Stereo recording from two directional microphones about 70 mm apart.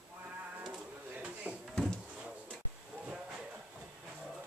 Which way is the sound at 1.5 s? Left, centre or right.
Right.